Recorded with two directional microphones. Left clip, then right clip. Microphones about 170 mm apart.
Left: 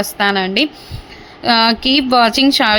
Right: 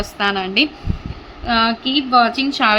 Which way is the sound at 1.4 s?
40° left (ahead or behind).